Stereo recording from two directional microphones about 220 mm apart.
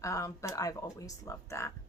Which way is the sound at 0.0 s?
15° left (ahead or behind).